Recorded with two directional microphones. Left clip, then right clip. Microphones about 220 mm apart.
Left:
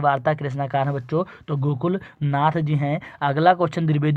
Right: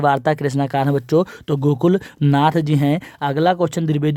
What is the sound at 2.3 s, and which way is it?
Speech, 40° right (ahead or behind).